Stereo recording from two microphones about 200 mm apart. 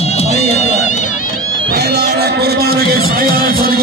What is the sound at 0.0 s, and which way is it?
Run, 30° left (ahead or behind).